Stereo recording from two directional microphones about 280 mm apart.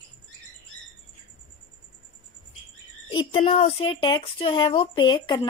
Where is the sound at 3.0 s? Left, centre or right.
Centre.